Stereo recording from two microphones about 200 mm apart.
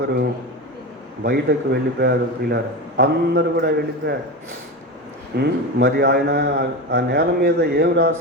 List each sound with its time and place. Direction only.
1.2 s a man's voice: 55° right (ahead or behind)
5.4 s a man's voice: 55° right (ahead or behind)